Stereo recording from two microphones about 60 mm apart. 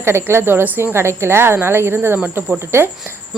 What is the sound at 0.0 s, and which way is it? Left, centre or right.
A woman's voice, right.